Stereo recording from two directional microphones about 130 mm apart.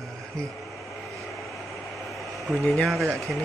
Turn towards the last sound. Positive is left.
turn(degrees=0)  # may be behind; listen again after turning